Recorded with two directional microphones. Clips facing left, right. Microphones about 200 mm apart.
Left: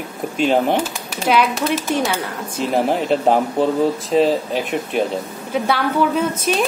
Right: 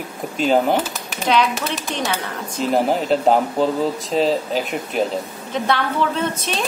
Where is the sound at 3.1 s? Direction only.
Centre (ahead or behind).